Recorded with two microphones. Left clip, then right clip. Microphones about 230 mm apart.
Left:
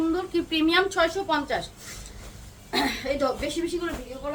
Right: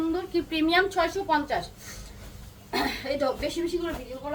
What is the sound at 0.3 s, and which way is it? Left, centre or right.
A woman's voice, centre.